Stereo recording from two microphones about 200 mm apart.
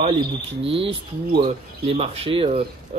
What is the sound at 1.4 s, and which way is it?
Speech, 30° right (ahead or behind).